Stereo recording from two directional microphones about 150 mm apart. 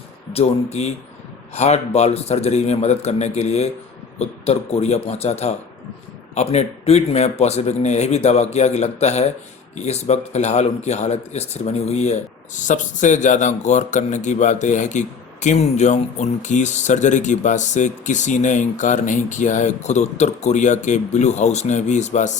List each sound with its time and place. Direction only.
0.3 s speech: 45° left (ahead or behind)